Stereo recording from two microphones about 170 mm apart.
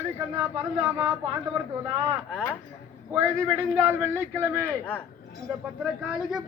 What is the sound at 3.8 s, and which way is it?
Speech, 15° right (ahead or behind).